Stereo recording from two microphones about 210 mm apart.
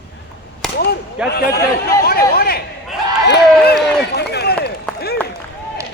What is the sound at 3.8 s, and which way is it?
Run, 50° left (ahead or behind).